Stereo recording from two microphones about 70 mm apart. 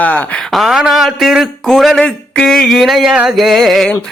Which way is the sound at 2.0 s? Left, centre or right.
Centre.